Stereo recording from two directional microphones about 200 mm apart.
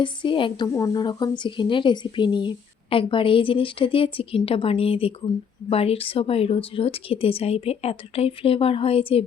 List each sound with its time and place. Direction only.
0.0 s a woman's voice: 25° left (ahead or behind)